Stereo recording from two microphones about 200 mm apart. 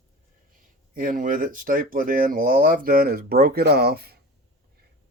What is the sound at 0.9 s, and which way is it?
Speech, 45° right (ahead or behind).